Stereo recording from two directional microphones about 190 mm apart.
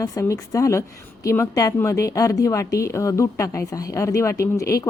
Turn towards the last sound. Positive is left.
turn(degrees=15)  # may be behind; listen again after turning